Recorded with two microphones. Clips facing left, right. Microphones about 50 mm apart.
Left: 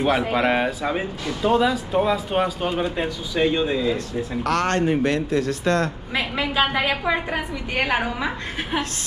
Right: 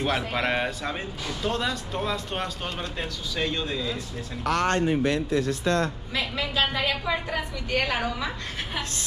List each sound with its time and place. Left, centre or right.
0.0 s speech: centre
4.5 s speech: left
6.1 s a woman's voice: left